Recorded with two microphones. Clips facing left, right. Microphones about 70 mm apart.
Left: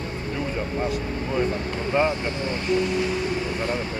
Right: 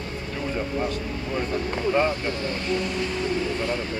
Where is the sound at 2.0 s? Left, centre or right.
Centre.